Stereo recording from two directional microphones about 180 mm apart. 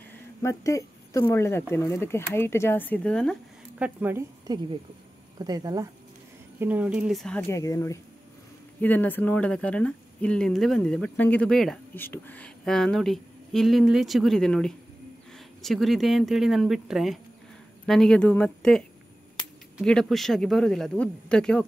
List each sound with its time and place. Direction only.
0.4 s speech: 15° left (ahead or behind)
3.8 s speech: 10° right (ahead or behind)
6.6 s speech: 10° right (ahead or behind)